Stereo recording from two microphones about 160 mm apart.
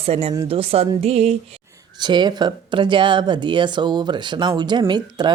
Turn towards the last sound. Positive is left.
turn(degrees=-25)  # may be behind; listen again after turning